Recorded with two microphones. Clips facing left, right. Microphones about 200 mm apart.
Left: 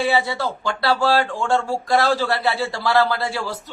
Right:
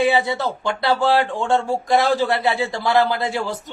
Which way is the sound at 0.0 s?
20° right (ahead or behind).